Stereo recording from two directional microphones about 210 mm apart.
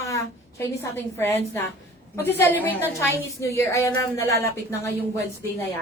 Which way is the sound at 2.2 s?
10° left (ahead or behind).